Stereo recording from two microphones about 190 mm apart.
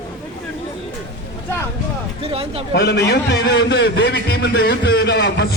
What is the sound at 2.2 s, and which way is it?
Speech, 30° right (ahead or behind).